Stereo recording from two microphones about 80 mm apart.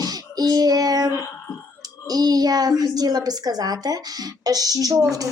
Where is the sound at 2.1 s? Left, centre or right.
Right.